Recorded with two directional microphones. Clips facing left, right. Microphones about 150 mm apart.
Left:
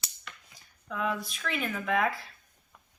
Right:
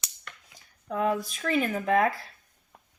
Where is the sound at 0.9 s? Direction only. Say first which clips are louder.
Right 5 dB; 40° right (ahead or behind).